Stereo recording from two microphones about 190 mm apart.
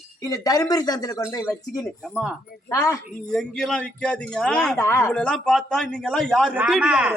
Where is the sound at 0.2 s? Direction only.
20° left (ahead or behind).